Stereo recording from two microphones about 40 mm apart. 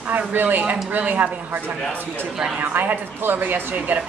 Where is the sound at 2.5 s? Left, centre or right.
Right.